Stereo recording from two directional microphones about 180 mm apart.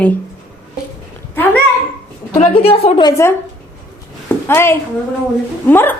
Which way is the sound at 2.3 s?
35° left (ahead or behind).